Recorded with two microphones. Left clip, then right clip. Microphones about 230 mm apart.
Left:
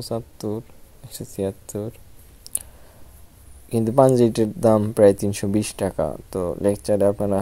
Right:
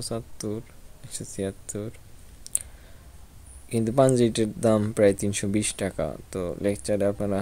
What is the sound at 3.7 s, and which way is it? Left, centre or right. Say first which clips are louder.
Speech: left 5 dB; centre.